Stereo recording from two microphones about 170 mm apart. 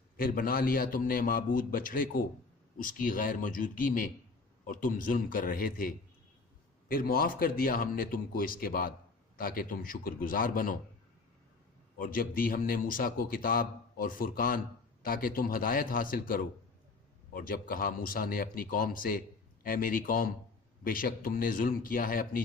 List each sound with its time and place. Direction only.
0.2 s a man's voice: 55° left (ahead or behind)
11.9 s a man's voice: 55° left (ahead or behind)